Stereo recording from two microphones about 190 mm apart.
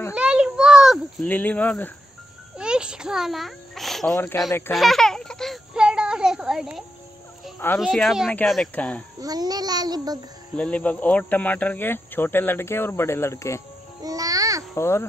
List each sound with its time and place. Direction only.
0.1 s a sound: 5° right (ahead or behind)
1.3 s speech: 10° left (ahead or behind)
2.5 s a sound: 5° right (ahead or behind)
4.1 s speech: 10° left (ahead or behind)
4.7 s a sound: centre (ahead or behind)
7.6 s speech: 10° left (ahead or behind)
9.2 s a child's voice: 20° right (ahead or behind)
10.5 s speech: 5° left (ahead or behind)
14.0 s babbling: 20° right (ahead or behind)
14.7 s a child's voice: 15° left (ahead or behind)